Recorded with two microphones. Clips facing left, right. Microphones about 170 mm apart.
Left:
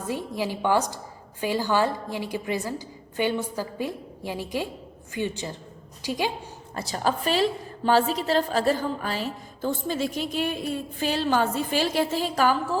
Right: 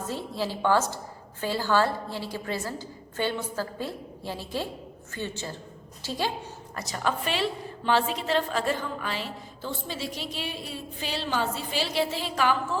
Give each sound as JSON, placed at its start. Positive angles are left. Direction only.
{"t": 0.1, "sound": "a woman's voice", "side_deg": 15}
{"t": 6.7, "sound": "a woman's voice", "side_deg": 30}